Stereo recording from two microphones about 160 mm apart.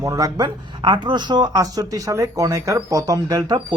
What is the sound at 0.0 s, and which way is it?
Speech, 20° right (ahead or behind).